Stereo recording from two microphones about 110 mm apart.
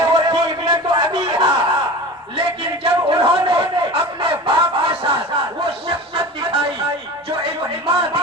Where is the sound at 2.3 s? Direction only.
65° right (ahead or behind).